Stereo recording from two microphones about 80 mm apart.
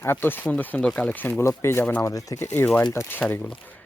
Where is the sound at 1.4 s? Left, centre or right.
Left.